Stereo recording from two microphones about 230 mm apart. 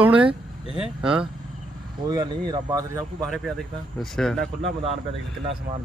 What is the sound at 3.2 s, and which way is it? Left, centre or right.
A man's voice, centre.